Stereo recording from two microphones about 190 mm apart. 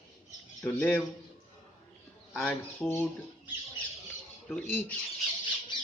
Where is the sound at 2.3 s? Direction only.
10° left (ahead or behind).